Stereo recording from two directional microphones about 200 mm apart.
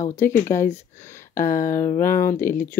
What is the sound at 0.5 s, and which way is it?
Speech, 15° left (ahead or behind).